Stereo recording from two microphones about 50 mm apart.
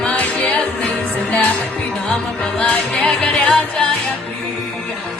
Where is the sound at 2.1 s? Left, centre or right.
Centre.